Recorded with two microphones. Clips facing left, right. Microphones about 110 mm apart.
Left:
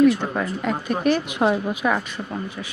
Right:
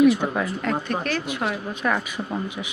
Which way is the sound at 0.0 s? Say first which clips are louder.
Even; 10° right (ahead or behind).